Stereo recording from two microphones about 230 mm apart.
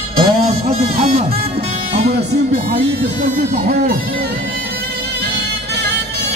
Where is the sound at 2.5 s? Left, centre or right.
Right.